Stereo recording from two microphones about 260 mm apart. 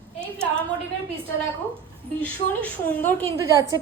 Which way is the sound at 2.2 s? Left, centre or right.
Centre.